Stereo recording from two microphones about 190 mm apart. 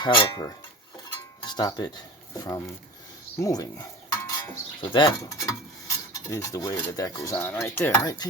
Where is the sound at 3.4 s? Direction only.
20° left (ahead or behind).